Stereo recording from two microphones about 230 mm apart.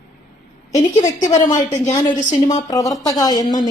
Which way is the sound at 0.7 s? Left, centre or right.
Centre.